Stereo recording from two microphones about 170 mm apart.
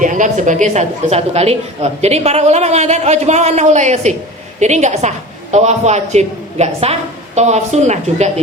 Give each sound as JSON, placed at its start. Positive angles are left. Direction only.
{"t": 0.0, "sound": "a woman's voice", "side_deg": -50}